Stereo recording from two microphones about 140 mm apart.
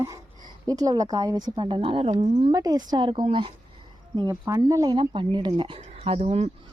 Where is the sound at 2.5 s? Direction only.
25° right (ahead or behind).